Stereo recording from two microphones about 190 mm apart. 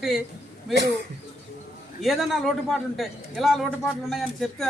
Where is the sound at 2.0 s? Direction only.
Centre (ahead or behind).